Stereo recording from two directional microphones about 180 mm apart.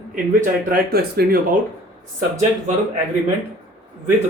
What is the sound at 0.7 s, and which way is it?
Speech, 55° right (ahead or behind).